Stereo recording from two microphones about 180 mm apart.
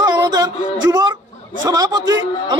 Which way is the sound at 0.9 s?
20° right (ahead or behind).